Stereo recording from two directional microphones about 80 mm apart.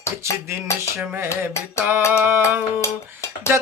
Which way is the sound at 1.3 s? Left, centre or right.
Left.